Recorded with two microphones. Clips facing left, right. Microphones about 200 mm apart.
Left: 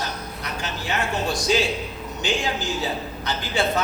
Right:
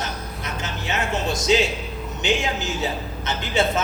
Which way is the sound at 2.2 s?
20° right (ahead or behind).